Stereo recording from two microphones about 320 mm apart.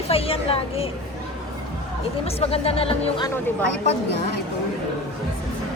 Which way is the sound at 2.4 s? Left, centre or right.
Centre.